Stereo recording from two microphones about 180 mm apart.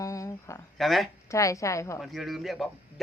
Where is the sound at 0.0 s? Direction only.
15° left (ahead or behind).